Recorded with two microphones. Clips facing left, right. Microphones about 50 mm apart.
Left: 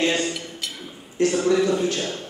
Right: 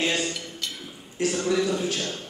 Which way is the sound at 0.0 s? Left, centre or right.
Centre.